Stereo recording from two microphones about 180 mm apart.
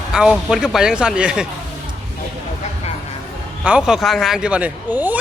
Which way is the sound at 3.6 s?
5° right (ahead or behind).